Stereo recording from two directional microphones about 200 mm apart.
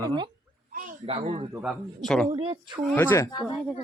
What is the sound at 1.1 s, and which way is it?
Speech, 30° right (ahead or behind).